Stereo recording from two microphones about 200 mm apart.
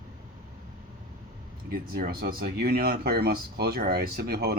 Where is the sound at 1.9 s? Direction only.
50° right (ahead or behind).